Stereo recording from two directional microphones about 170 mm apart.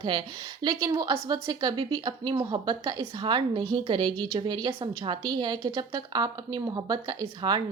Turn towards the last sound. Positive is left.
turn(degrees=-25)  # may be behind; listen again after turning